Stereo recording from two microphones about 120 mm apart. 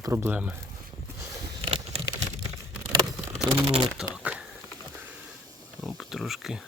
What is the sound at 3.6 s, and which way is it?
Speech, 55° right (ahead or behind).